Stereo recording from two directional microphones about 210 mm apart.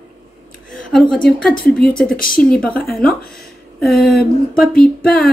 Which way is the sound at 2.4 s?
5° left (ahead or behind).